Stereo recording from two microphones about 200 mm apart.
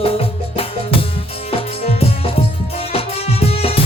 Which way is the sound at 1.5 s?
30° left (ahead or behind).